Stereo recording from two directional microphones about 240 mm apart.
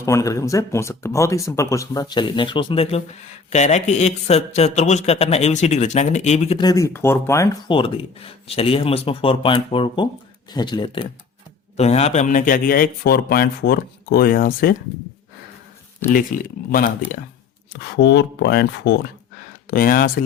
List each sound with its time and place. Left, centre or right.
0.0 s speech: centre; by 14.8 s left
16.3 s speech: left
17.9 s speech: left